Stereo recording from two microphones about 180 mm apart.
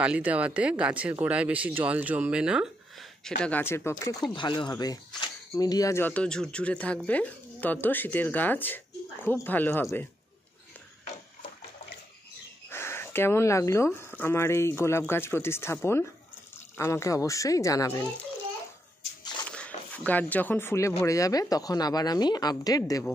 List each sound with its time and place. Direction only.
0.0 s speech: 5° right (ahead or behind); by 10.0 s 10° left (ahead or behind)
12.6 s speech: 15° left (ahead or behind)
19.5 s a woman's voice: 5° left (ahead or behind)